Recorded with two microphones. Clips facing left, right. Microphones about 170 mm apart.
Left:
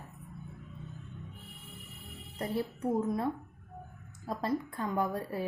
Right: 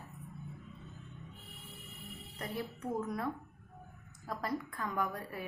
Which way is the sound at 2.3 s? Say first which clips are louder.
Left 7 dB; 30° left (ahead or behind).